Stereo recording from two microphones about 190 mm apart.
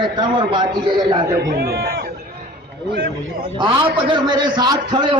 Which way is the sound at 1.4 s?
55° right (ahead or behind).